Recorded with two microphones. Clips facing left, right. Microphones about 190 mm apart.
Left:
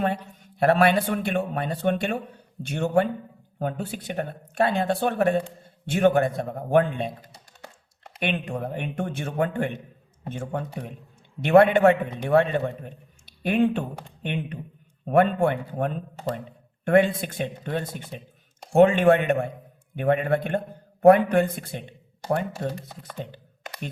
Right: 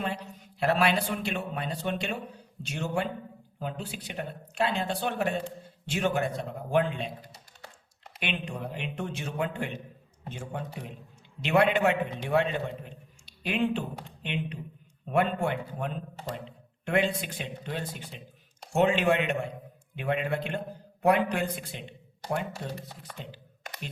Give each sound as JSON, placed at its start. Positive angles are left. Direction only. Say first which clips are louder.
{"t": 0.0, "sound": "a man's voice", "louder": "left 7 dB", "side_deg": 50}
{"t": 8.2, "sound": "a man's voice", "louder": "left 6 dB", "side_deg": 55}